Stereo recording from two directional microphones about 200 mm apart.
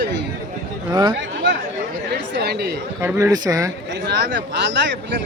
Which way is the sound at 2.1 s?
55° right (ahead or behind).